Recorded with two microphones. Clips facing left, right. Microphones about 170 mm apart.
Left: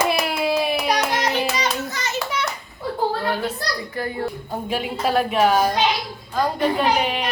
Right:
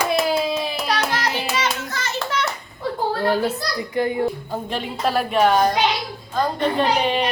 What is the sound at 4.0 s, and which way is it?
Speech, 20° right (ahead or behind).